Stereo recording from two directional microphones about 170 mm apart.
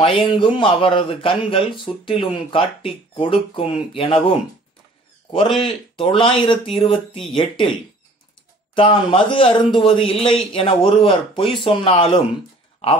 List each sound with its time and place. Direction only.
0.0 s a man's voice: 30° left (ahead or behind)
5.6 s a man's voice: 30° left (ahead or behind)
8.7 s a man's voice: 30° left (ahead or behind)